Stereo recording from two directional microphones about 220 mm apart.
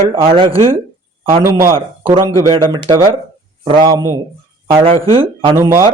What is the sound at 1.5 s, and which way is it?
Speech, 10° right (ahead or behind).